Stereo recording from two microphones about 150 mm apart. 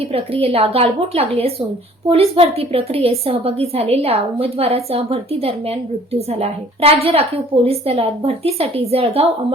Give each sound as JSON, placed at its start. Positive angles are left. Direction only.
{"t": 0.4, "sound": "a woman's voice", "side_deg": -40}